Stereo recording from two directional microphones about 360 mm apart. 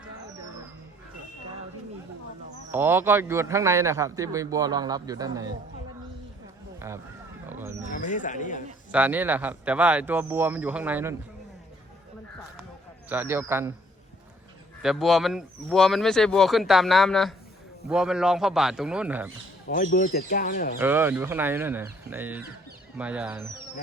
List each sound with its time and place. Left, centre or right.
2.7 s a man's voice: centre
6.7 s run: centre
7.4 s a sound: centre
7.9 s speech: left
8.9 s speech: centre
13.1 s a man's voice: centre
14.8 s speech: centre
19.6 s speech: left
20.7 s speech: centre